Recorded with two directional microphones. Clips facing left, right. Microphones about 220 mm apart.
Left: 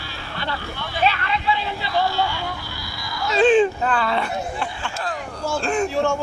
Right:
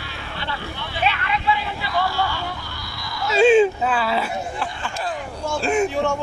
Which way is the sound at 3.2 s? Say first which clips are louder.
Right 1 dB; 5° right (ahead or behind).